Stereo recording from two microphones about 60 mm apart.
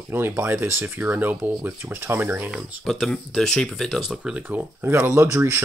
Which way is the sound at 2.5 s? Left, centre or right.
Centre.